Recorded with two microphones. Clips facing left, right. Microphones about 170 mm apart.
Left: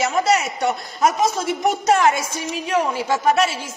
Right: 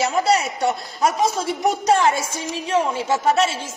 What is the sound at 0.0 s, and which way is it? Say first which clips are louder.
A man's voice: even; 30° right (ahead or behind).